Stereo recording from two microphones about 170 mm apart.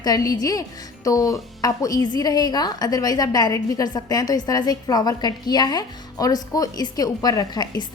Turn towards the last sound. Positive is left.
turn(degrees=25)  # may be behind; listen again after turning